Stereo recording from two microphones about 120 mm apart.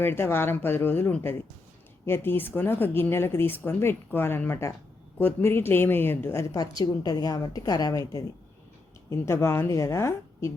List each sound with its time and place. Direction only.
0.0 s a woman's voice: 20° left (ahead or behind)